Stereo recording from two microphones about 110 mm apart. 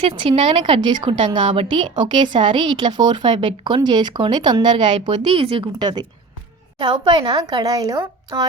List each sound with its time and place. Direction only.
0.0 s a woman's voice: 55° right (ahead or behind)
4.9 s a woman's voice: 55° right (ahead or behind); by 8.4 s 35° right (ahead or behind)